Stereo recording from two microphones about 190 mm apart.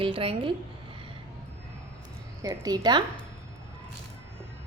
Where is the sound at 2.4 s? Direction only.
20° right (ahead or behind).